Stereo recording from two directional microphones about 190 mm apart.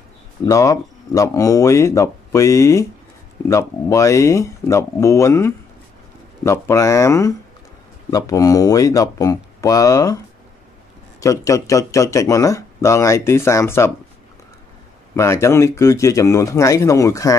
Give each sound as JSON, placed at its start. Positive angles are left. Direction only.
{"t": 0.5, "sound": "speech", "side_deg": 15}
{"t": 11.1, "sound": "speech", "side_deg": 15}
{"t": 15.1, "sound": "speech", "side_deg": 15}